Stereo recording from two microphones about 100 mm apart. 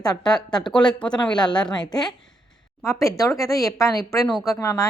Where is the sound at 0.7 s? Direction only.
10° left (ahead or behind).